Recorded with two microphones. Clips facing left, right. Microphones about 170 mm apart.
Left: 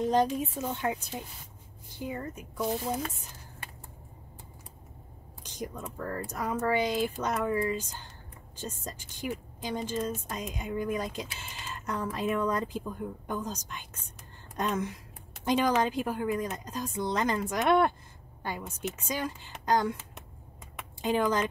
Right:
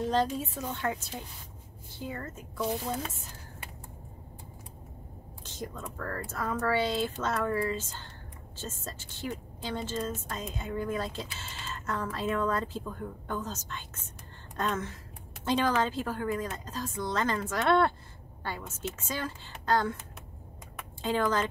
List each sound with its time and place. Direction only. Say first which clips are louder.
0.0 s speech: left 2 dB; 15° left (ahead or behind)
5.4 s speech: left 1 dB; 15° left (ahead or behind)
21.0 s speech: left 1 dB; 15° left (ahead or behind)